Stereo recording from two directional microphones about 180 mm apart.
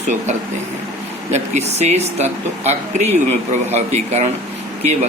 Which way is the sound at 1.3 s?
40° right (ahead or behind).